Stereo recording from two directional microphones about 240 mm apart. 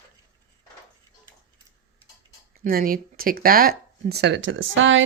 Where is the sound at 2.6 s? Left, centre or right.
Right.